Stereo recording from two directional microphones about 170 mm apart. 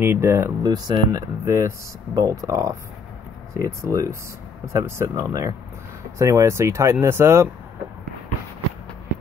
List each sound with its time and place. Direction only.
0.0 s speech: 15° right (ahead or behind)